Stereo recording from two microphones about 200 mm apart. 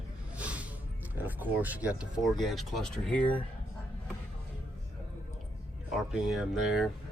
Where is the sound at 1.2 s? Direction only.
10° right (ahead or behind).